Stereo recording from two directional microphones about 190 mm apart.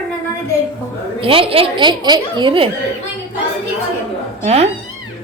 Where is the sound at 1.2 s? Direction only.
30° right (ahead or behind).